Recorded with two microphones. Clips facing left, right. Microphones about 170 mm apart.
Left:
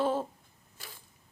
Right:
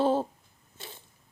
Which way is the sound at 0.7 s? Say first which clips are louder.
Right 5 dB; 25° right (ahead or behind).